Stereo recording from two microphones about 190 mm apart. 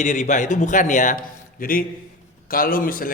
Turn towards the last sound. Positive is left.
turn(degrees=50)  # may be behind; listen again after turning